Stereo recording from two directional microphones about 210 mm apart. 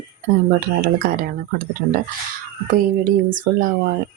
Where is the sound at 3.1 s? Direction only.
40° right (ahead or behind).